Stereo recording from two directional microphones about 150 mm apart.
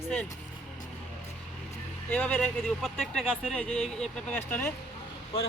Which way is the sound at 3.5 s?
5° left (ahead or behind).